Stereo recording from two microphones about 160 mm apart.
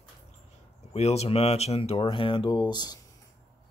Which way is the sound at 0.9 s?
40° left (ahead or behind).